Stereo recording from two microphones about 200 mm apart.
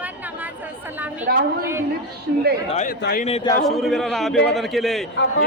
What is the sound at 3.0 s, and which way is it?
Speech, 50° left (ahead or behind).